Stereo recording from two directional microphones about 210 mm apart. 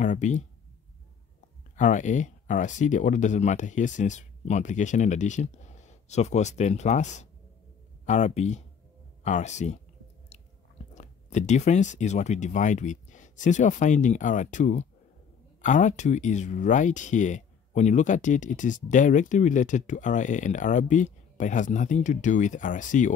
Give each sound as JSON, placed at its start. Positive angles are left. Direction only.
{"t": 0.0, "sound": "speech", "side_deg": 35}
{"t": 1.8, "sound": "speech", "side_deg": 35}
{"t": 10.3, "sound": "chewing", "side_deg": 30}
{"t": 11.0, "sound": "speech", "side_deg": 35}